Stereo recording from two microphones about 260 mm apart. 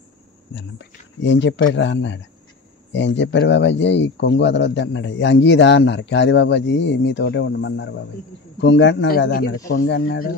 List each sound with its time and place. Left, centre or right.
0.6 s speech: left